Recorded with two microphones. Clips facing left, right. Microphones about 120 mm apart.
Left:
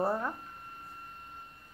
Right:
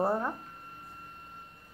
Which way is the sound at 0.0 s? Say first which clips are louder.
Right 2 dB; 15° right (ahead or behind).